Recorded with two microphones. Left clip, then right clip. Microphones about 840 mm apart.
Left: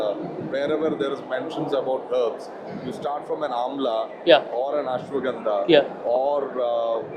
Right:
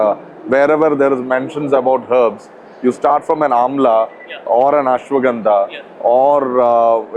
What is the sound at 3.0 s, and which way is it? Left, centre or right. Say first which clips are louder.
Speech: right 13 dB; right.